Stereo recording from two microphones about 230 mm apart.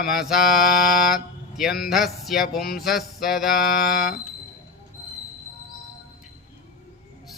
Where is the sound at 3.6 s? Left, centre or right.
Left.